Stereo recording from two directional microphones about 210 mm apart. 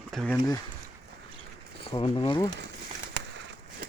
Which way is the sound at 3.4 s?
55° right (ahead or behind).